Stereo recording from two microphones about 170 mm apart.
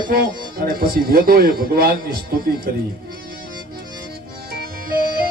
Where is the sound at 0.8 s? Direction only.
60° right (ahead or behind).